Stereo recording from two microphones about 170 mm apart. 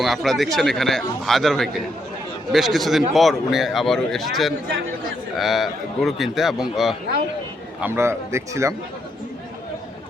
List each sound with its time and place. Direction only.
0.0 s a man's voice: centre (ahead or behind)
7.8 s a man's voice: 15° right (ahead or behind)